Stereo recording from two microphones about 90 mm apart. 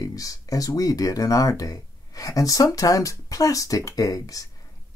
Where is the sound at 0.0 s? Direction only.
40° left (ahead or behind).